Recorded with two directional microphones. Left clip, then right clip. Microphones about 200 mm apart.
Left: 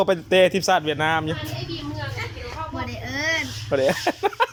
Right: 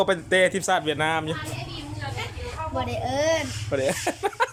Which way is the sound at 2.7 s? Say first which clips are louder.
Right 6 dB; 15° right (ahead or behind).